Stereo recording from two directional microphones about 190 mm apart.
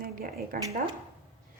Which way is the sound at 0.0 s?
45° right (ahead or behind).